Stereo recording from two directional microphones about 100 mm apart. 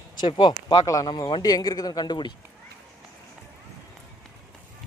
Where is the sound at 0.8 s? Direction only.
35° left (ahead or behind).